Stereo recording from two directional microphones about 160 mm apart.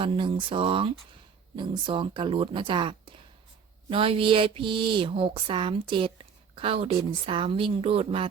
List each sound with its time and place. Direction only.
0.0 s speech: 30° right (ahead or behind)